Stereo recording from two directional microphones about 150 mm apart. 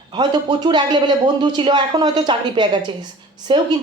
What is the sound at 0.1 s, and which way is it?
A man's voice, 30° right (ahead or behind).